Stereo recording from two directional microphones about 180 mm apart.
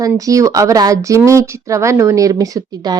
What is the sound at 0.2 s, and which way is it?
A woman's voice, 20° right (ahead or behind).